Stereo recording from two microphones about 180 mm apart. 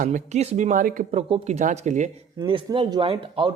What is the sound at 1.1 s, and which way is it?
Speech, 35° right (ahead or behind).